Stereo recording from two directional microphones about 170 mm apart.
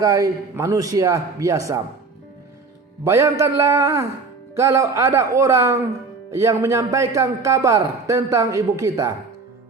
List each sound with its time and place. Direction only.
0.0 s a man's voice: 20° right (ahead or behind)
3.0 s a man's voice: 15° right (ahead or behind)